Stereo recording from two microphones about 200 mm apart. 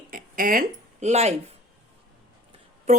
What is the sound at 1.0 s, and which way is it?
Speech, 30° right (ahead or behind).